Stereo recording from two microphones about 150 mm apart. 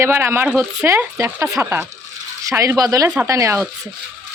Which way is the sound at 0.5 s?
Centre (ahead or behind).